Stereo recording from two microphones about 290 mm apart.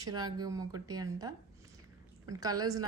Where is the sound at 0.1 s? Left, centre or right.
Centre.